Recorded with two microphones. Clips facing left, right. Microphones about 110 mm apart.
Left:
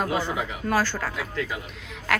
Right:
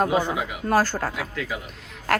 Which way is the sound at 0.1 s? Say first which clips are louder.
Right 3 dB; 15° right (ahead or behind).